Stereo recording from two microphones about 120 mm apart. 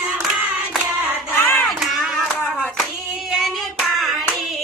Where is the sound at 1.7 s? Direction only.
5° right (ahead or behind).